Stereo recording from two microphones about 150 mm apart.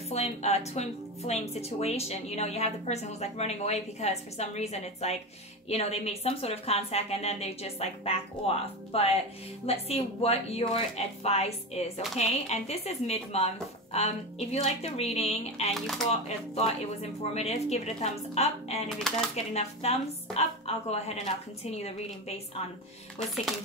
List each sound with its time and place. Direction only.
0.1 s speech: 45° left (ahead or behind)
15.7 s speech: centre (ahead or behind)
16.1 s speech: 45° left (ahead or behind)